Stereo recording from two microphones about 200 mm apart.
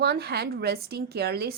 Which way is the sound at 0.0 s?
55° right (ahead or behind).